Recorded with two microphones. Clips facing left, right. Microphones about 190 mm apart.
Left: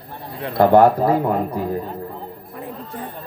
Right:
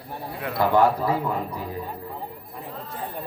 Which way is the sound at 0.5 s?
50° left (ahead or behind).